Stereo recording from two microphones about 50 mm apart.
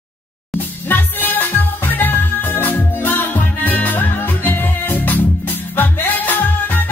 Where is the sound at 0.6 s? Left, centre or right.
Left.